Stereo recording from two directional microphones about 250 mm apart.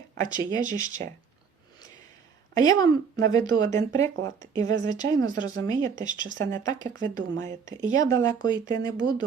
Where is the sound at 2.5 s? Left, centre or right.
Centre.